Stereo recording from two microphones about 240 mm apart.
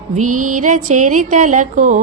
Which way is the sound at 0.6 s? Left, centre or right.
Right.